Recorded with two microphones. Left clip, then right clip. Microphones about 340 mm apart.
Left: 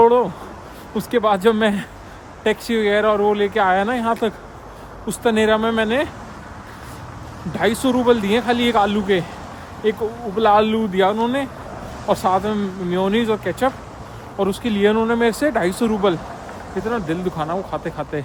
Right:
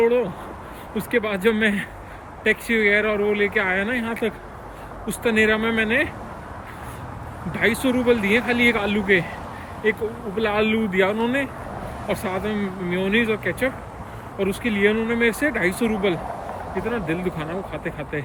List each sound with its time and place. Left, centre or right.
0.0 s speech: centre
7.5 s speech: centre